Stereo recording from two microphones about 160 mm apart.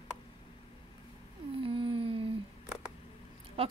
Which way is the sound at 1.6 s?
35° right (ahead or behind).